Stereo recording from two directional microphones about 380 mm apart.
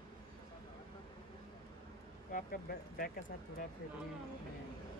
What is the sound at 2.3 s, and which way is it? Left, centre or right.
Speech, left.